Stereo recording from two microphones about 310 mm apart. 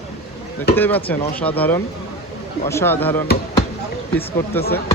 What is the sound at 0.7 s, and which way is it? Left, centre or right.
Speech, centre.